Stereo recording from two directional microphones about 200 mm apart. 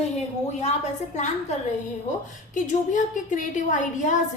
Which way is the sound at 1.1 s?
35° left (ahead or behind).